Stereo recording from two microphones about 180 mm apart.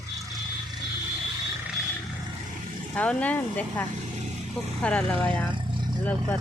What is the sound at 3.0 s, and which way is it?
Speech, 5° left (ahead or behind).